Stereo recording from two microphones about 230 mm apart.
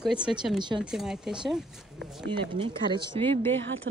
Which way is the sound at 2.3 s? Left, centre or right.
Right.